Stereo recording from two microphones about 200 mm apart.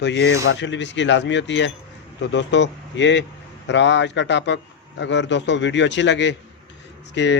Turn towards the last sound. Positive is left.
turn(degrees=60)  # may be behind; listen again after turning